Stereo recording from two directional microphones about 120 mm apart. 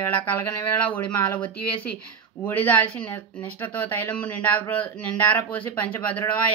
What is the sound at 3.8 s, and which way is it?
A man's voice, 15° left (ahead or behind).